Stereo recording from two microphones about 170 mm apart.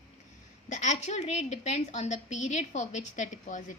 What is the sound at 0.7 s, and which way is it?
A woman's voice, 45° left (ahead or behind).